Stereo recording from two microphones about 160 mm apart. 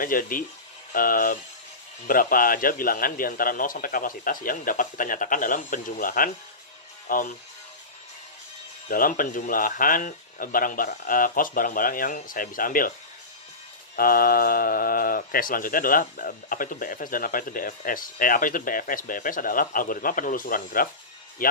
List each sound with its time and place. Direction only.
0.0 s speech: 60° left (ahead or behind)
8.8 s speech: 60° left (ahead or behind)
13.9 s speech: 65° left (ahead or behind)